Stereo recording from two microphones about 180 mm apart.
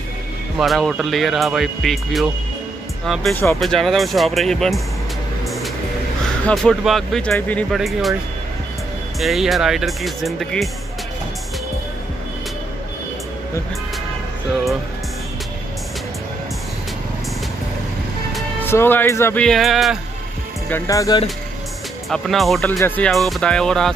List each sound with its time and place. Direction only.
0.6 s speech: centre (ahead or behind)
3.5 s speech: centre (ahead or behind)
6.4 s speech: centre (ahead or behind)
9.2 s speech: centre (ahead or behind)
18.6 s speech: 10° left (ahead or behind)
20.7 s speech: 20° left (ahead or behind)
22.1 s speech: centre (ahead or behind)